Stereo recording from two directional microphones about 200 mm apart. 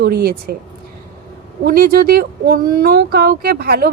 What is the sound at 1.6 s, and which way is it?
Speech, 45° right (ahead or behind).